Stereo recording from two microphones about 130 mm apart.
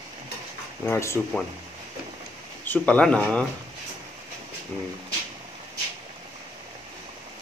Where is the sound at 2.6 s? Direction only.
10° left (ahead or behind).